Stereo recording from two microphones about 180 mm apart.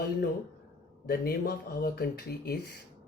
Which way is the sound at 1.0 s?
60° left (ahead or behind).